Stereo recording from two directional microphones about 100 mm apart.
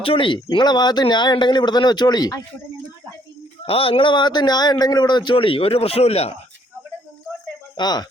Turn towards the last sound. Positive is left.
turn(degrees=45)  # may be behind; listen again after turning